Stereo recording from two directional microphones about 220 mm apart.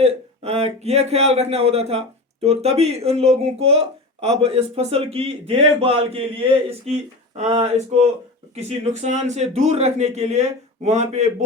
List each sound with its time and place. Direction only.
0.0 s a man's voice: 30° right (ahead or behind)